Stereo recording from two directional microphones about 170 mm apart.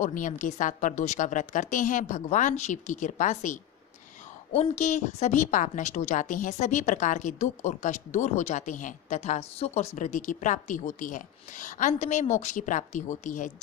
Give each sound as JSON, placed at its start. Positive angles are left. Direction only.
{"t": 0.0, "sound": "a woman's voice", "side_deg": 50}